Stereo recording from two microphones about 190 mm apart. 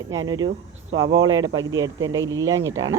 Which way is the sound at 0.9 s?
90° right.